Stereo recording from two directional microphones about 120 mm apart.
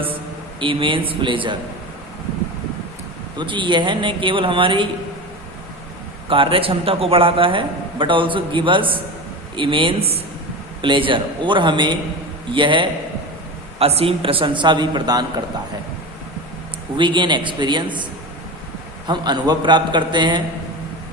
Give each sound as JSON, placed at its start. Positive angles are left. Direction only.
{"t": 0.6, "sound": "a man's voice", "side_deg": -45}
{"t": 3.3, "sound": "a man's voice", "side_deg": -40}
{"t": 6.2, "sound": "a man's voice", "side_deg": -45}
{"t": 13.7, "sound": "a man's voice", "side_deg": -55}
{"t": 17.0, "sound": "a man's voice", "side_deg": -40}